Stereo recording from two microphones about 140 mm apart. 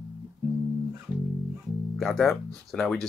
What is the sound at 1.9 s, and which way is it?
Speech, centre (ahead or behind).